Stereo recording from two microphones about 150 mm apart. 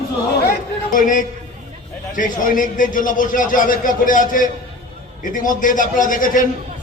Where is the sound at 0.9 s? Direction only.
60° left (ahead or behind).